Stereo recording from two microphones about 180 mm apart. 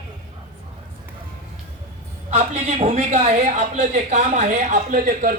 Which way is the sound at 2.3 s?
35° right (ahead or behind).